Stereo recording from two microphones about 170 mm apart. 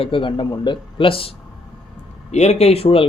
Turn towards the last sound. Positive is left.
turn(degrees=35)  # may be behind; listen again after turning